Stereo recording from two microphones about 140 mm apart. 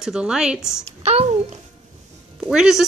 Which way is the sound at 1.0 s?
50° right (ahead or behind).